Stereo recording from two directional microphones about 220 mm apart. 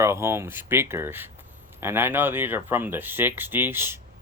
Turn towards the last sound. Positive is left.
turn(degrees=-10)  # may be behind; listen again after turning